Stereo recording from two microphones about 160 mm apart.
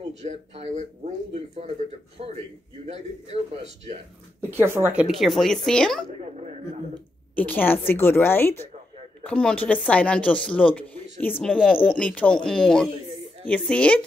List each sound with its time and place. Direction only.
0.2 s a man's voice: 45° right (ahead or behind)
4.4 s speech: 15° right (ahead or behind)
5.2 s speech: centre (ahead or behind)
7.3 s a woman's voice: 10° left (ahead or behind)
11.4 s speech: 5° right (ahead or behind)
11.9 s a woman's voice: 10° left (ahead or behind)